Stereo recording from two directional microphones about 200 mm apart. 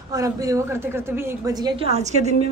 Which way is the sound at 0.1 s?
15° right (ahead or behind).